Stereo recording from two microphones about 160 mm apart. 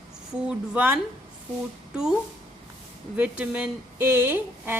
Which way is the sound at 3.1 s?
10° right (ahead or behind).